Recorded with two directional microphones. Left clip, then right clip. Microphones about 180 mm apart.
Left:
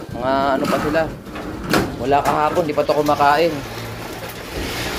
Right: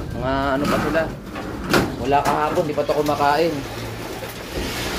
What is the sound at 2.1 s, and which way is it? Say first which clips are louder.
Speech: left 2 dB; 15° left (ahead or behind).